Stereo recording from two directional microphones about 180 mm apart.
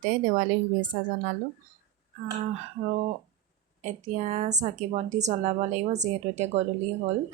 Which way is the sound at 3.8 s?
40° right (ahead or behind).